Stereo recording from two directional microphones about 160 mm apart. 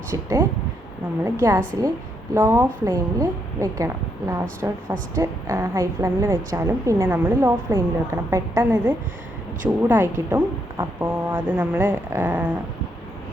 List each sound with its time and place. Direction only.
0.1 s a woman's voice: 20° right (ahead or behind)